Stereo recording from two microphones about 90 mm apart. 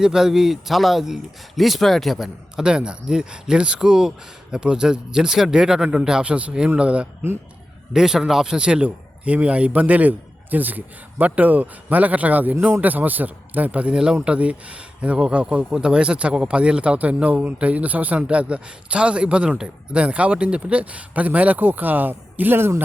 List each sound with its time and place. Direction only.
0.0 s a man's voice: 5° right (ahead or behind); by 22.8 s 25° right (ahead or behind)